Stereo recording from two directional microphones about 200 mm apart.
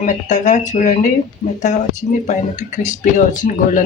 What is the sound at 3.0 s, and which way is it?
Speech, 40° left (ahead or behind).